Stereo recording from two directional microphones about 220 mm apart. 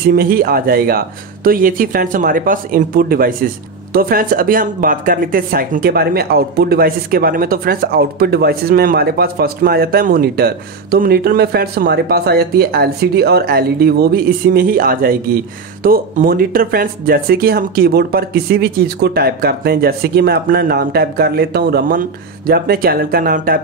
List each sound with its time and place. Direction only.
0.1 s speech: 40° right (ahead or behind)